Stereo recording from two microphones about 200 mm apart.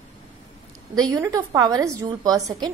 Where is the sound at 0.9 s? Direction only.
20° right (ahead or behind).